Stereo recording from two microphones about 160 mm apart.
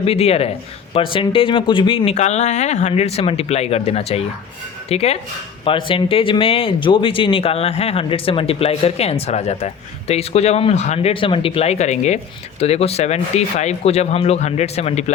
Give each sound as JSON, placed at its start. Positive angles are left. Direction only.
{"t": 0.0, "sound": "speech", "side_deg": 40}
{"t": 2.1, "sound": "speech", "side_deg": 45}